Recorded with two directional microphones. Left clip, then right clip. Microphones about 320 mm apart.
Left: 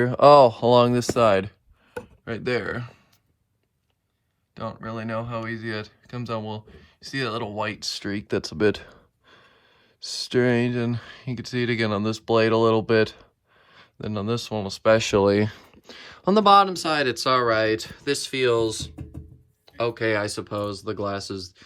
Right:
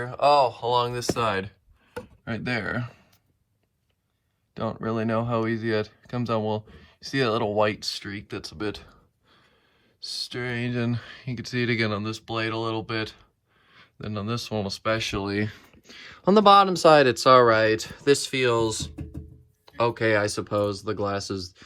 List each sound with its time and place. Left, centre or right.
0.0 s speech: left
2.2 s speech: centre
4.5 s speech: centre